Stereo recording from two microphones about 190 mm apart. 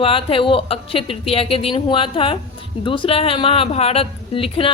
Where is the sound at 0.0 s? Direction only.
30° left (ahead or behind).